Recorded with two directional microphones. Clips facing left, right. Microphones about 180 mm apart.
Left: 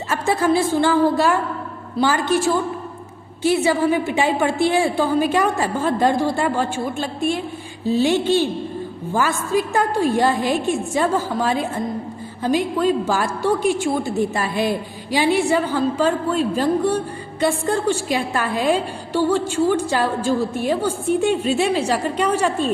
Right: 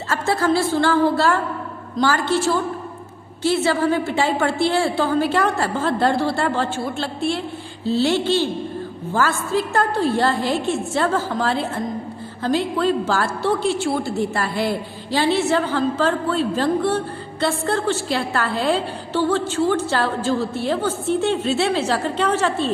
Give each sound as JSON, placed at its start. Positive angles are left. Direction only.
{"t": 0.1, "sound": "a woman's voice", "side_deg": 15}